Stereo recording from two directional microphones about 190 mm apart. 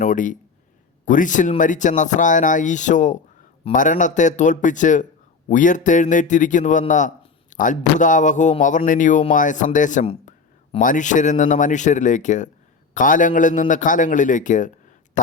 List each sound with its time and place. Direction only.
0.0 s a man's voice: 40° left (ahead or behind)